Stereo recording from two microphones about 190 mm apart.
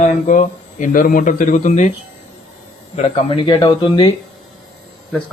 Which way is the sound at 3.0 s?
30° left (ahead or behind).